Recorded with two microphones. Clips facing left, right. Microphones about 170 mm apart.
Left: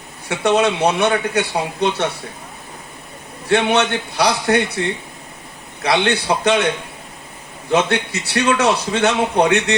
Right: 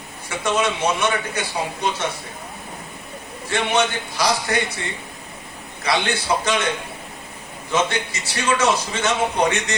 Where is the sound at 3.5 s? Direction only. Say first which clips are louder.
Left 5 dB; 65° left (ahead or behind).